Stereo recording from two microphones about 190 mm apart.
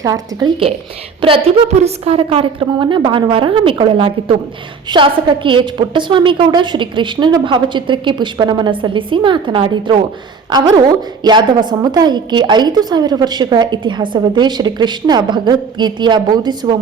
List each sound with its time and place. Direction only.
0.0 s a woman's voice: 20° right (ahead or behind)
11.2 s a woman's voice: 25° right (ahead or behind)